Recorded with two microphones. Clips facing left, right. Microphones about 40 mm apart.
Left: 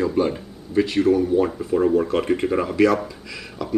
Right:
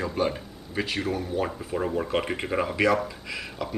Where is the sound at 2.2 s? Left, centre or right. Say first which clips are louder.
Left 6 dB; centre.